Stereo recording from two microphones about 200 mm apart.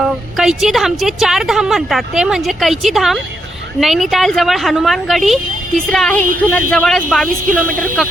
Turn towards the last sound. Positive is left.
turn(degrees=-45)  # may be behind; listen again after turning